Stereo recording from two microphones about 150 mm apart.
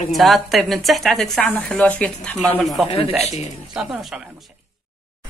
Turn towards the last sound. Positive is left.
turn(degrees=0)  # may be behind; listen again after turning